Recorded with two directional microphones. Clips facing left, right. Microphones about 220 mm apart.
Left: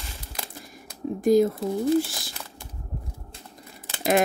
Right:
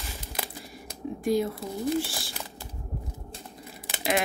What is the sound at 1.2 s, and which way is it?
Speech, 45° left (ahead or behind).